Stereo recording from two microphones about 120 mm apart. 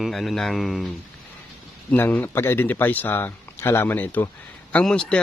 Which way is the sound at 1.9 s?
15° left (ahead or behind).